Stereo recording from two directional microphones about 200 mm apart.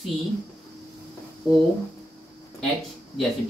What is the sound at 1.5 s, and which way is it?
Speech, 20° left (ahead or behind).